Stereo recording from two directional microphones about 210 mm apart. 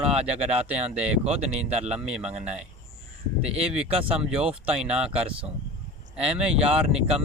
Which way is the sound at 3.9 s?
30° right (ahead or behind).